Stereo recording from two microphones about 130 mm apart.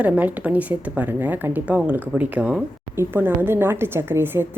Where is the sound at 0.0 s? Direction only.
10° right (ahead or behind).